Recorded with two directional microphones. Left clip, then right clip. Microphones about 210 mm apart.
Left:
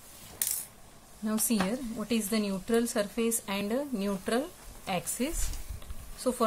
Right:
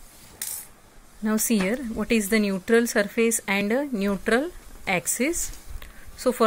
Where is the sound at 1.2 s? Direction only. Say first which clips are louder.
Right 6 dB; 25° right (ahead or behind).